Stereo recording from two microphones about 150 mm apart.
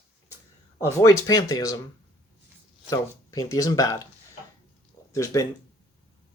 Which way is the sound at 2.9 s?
25° left (ahead or behind).